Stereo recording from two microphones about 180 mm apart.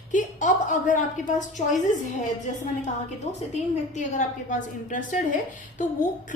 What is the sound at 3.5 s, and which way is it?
A woman's voice, 40° left (ahead or behind).